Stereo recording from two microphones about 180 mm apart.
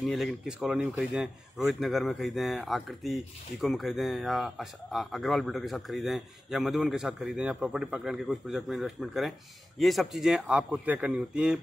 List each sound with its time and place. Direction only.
0.0 s speech: centre (ahead or behind)